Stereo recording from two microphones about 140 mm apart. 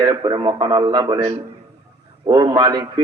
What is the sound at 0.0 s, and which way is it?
A man's voice, 35° right (ahead or behind).